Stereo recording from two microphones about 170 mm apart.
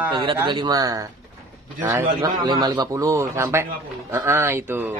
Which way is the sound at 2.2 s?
25° right (ahead or behind).